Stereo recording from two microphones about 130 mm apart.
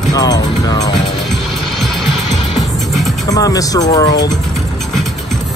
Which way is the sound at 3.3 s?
25° left (ahead or behind).